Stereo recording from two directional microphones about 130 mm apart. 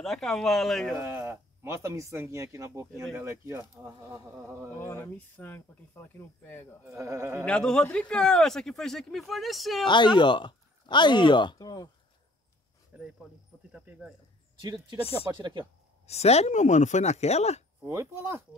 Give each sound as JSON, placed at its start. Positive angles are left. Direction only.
{"t": 0.0, "sound": "speech", "side_deg": 5}
{"t": 0.9, "sound": "speech", "side_deg": -20}
{"t": 4.7, "sound": "speech", "side_deg": 15}
{"t": 6.9, "sound": "speech", "side_deg": -25}
{"t": 7.4, "sound": "speech", "side_deg": 5}
{"t": 9.8, "sound": "speech", "side_deg": 35}
{"t": 12.9, "sound": "speech", "side_deg": -10}
{"t": 14.6, "sound": "speech", "side_deg": -35}
{"t": 16.1, "sound": "speech", "side_deg": 55}
{"t": 17.8, "sound": "speech", "side_deg": -20}